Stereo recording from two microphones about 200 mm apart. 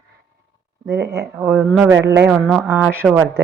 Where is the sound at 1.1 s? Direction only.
15° right (ahead or behind).